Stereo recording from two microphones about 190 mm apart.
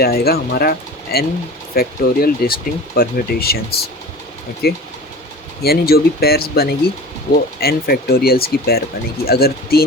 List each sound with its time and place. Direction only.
0.0 s speech: 55° left (ahead or behind)